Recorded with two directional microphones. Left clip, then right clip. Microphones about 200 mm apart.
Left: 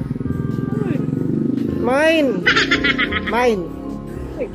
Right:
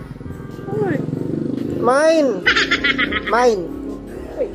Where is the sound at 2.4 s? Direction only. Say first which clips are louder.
Even; centre (ahead or behind).